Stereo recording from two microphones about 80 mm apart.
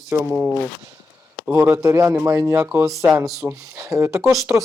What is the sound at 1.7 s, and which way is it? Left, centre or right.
Speech, right.